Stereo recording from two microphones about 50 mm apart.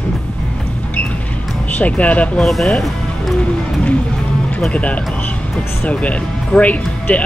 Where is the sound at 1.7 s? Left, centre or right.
Left.